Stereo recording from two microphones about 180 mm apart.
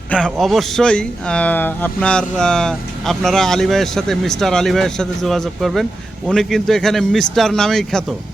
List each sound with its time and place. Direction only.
0.3 s speech: centre (ahead or behind)